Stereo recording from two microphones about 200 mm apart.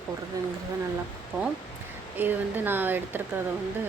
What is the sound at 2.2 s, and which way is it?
Speech, 10° right (ahead or behind).